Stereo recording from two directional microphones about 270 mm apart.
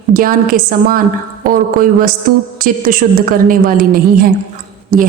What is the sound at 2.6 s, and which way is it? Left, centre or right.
A woman's voice, right.